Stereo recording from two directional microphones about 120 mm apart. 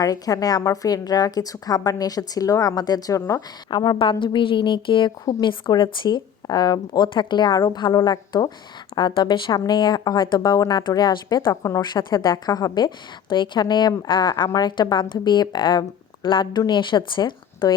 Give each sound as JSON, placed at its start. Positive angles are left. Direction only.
{"t": 0.0, "sound": "a woman's voice", "side_deg": 30}
{"t": 3.7, "sound": "a woman's voice", "side_deg": 40}